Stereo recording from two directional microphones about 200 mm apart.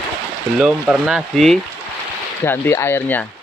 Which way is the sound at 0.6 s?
5° right (ahead or behind).